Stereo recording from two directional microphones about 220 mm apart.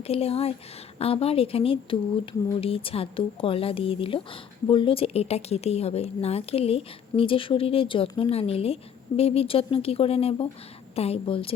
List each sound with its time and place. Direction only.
0.0 s speech: 25° left (ahead or behind)